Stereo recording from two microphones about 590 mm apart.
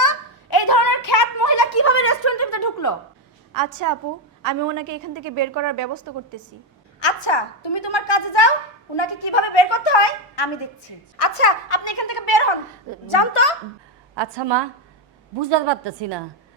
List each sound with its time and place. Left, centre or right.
0.5 s a sound: left
3.5 s a woman's voice: right
7.0 s a woman's voice: left
11.2 s a woman's voice: left
13.1 s a woman's voice: left
14.2 s a woman's voice: right